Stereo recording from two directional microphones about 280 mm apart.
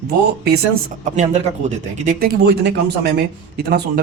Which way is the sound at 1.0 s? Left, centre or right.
Right.